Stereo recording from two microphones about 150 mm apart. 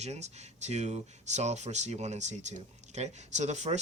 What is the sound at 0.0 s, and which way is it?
Speech, 45° right (ahead or behind).